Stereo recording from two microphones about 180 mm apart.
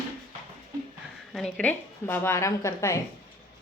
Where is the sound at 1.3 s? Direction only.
5° left (ahead or behind).